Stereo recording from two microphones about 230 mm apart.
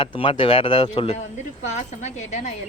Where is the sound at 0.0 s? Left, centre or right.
Left.